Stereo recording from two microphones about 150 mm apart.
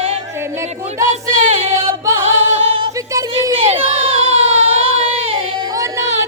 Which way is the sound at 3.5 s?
35° right (ahead or behind).